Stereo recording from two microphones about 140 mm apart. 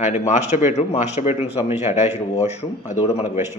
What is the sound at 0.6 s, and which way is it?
Speech, 55° left (ahead or behind).